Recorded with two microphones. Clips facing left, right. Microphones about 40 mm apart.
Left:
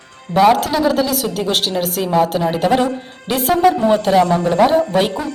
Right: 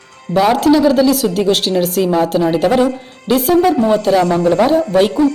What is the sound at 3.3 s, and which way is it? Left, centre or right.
A woman's voice, left.